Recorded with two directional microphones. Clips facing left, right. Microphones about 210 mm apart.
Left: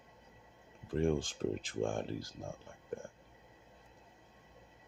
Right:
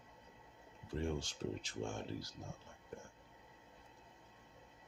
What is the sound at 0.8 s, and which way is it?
Speech, 50° left (ahead or behind).